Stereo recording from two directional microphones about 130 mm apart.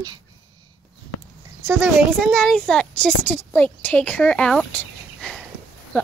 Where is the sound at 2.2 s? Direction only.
Centre (ahead or behind).